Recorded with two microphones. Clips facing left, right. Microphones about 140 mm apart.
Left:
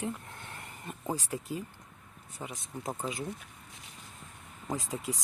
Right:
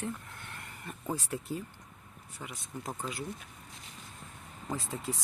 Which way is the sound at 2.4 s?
20° left (ahead or behind).